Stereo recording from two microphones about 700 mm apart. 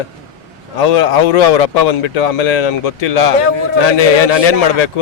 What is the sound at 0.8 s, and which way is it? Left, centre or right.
A man's voice, left.